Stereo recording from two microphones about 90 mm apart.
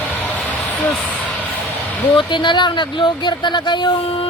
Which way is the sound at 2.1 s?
60° left (ahead or behind).